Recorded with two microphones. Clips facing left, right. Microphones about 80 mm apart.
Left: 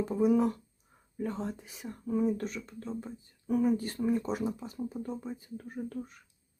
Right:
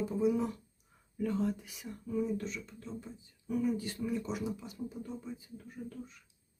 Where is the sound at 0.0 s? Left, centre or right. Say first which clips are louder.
Left 5 dB; left.